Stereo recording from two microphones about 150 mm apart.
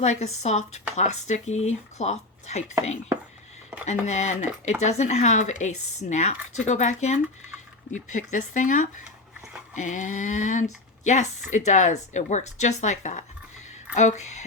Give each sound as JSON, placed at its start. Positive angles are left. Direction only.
{"t": 0.0, "sound": "speech", "side_deg": 50}
{"t": 3.8, "sound": "speech", "side_deg": 50}